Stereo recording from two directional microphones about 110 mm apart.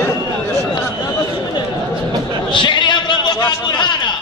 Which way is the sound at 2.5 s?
45° left (ahead or behind).